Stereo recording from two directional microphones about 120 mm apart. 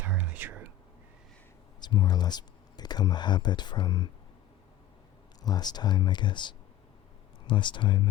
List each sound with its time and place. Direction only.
0.0 s whispering: 15° right (ahead or behind)
1.8 s speech: 35° left (ahead or behind)
5.4 s speech: 35° left (ahead or behind)